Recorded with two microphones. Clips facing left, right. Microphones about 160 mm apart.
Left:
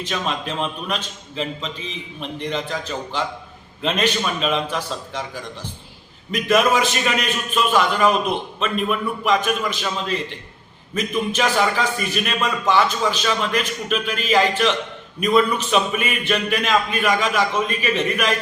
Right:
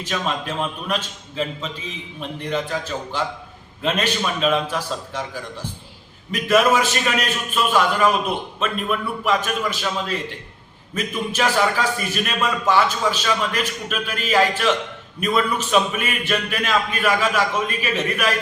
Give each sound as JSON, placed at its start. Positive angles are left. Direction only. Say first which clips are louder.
{"t": 0.0, "sound": "a man's voice", "louder": "even", "side_deg": -5}
{"t": 6.3, "sound": "a man's voice", "louder": "even", "side_deg": -5}